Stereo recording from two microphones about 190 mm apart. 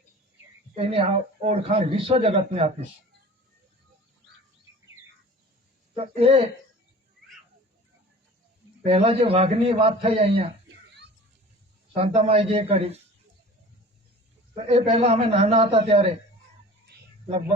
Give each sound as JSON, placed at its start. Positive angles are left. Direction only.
{"t": 0.8, "sound": "speech", "side_deg": -30}
{"t": 6.0, "sound": "speech", "side_deg": -30}
{"t": 8.8, "sound": "a man's voice", "side_deg": -30}
{"t": 12.0, "sound": "speech", "side_deg": -35}
{"t": 14.5, "sound": "speech", "side_deg": -35}